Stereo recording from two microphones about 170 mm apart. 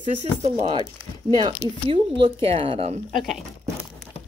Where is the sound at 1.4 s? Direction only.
30° right (ahead or behind).